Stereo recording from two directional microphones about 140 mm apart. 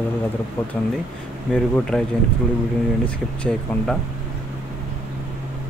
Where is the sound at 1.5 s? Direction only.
5° left (ahead or behind).